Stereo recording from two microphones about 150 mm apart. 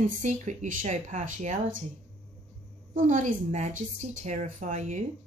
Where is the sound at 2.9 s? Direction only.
60° right (ahead or behind).